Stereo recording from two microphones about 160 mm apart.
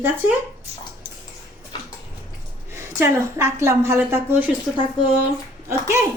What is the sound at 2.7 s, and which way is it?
A woman's voice, 15° right (ahead or behind).